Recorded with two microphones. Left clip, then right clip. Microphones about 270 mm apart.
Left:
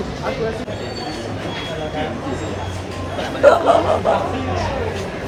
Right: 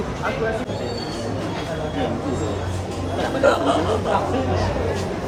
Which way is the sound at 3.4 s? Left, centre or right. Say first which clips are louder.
Left 7 dB; centre.